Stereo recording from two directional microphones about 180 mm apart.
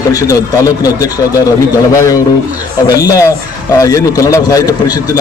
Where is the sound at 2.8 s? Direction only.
20° left (ahead or behind).